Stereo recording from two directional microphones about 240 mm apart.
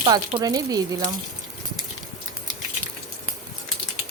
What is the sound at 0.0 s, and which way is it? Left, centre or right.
Speech, centre.